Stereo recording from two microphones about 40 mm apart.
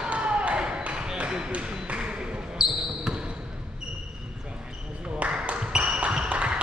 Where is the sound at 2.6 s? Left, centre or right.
Centre.